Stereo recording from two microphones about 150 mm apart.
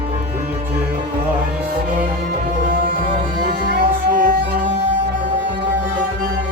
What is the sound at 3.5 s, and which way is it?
Music, 90° right.